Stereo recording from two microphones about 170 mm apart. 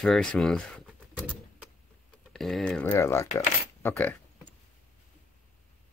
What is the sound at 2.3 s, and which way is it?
Speech, centre (ahead or behind).